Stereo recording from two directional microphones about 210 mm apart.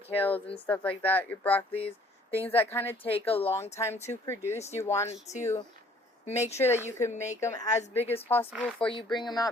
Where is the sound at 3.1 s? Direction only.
25° left (ahead or behind).